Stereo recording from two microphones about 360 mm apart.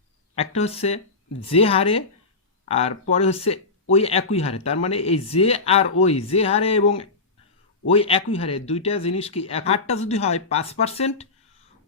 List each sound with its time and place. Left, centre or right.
0.3 s speech: centre
7.9 s speech: centre